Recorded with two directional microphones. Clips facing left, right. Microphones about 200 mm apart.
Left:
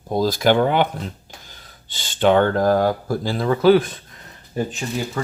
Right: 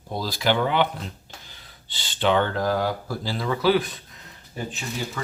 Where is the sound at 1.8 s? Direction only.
45° left (ahead or behind).